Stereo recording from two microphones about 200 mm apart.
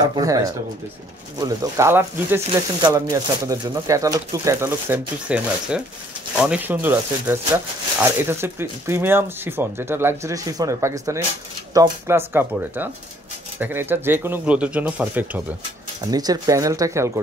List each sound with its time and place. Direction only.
0.0 s speech: 15° right (ahead or behind)
16.0 s speech: 20° right (ahead or behind)